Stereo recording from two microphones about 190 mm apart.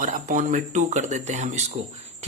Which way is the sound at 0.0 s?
45° right (ahead or behind).